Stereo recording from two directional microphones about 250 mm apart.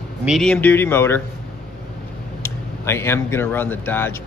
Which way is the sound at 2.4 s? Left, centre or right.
Centre.